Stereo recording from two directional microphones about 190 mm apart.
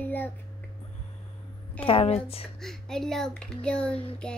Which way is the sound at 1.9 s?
30° left (ahead or behind).